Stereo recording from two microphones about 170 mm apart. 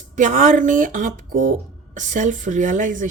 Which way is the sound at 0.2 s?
50° right (ahead or behind).